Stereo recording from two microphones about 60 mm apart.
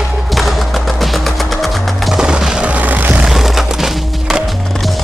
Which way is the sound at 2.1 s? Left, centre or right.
Centre.